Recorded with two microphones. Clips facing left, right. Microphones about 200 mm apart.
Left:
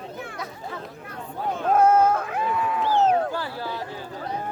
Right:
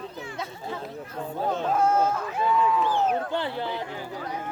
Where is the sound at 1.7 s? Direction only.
55° left (ahead or behind).